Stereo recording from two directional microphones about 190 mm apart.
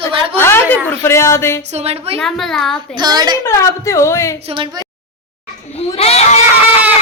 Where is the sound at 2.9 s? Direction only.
20° right (ahead or behind).